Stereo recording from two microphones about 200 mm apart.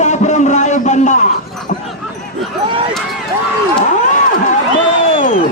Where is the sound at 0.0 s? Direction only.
35° left (ahead or behind).